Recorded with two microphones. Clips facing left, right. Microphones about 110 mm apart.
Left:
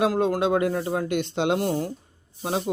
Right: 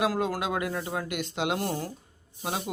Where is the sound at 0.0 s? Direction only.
30° left (ahead or behind).